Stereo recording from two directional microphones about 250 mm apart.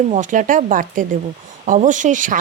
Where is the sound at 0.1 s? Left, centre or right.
Right.